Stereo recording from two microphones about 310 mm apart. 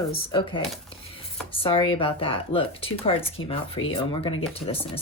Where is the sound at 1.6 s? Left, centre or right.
Centre.